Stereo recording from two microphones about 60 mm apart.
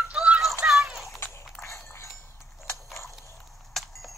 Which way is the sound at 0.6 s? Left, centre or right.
Centre.